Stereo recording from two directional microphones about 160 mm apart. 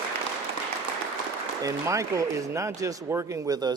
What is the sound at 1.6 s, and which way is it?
Speech, 20° right (ahead or behind).